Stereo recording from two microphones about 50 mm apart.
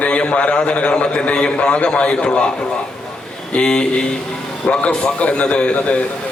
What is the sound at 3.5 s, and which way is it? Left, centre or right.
A man's voice, centre.